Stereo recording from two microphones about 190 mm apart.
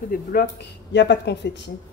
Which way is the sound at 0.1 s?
50° left (ahead or behind).